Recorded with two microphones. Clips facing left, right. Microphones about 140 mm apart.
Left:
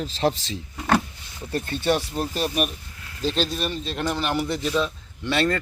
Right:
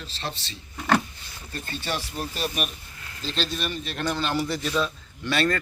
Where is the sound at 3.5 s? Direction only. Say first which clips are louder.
Left 3 dB; 30° left (ahead or behind).